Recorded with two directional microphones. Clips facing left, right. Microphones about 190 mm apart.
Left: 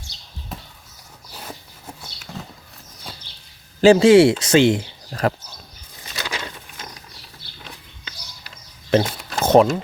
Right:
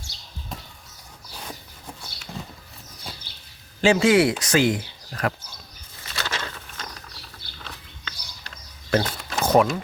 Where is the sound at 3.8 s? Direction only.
35° left (ahead or behind).